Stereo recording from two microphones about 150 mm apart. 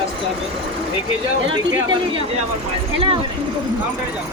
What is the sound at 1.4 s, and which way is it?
Speech, 30° right (ahead or behind).